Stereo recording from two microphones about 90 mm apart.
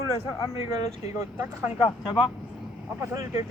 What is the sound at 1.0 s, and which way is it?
Speech, 35° right (ahead or behind).